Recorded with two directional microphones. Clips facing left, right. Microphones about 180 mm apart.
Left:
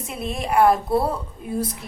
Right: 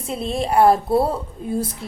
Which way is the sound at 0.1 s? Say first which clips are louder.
Right 3 dB; 30° right (ahead or behind).